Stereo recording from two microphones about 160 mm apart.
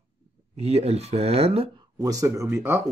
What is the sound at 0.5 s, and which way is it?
Speech, 40° right (ahead or behind).